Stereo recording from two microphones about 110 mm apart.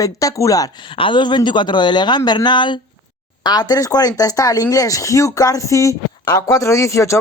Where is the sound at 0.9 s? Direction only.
50° left (ahead or behind).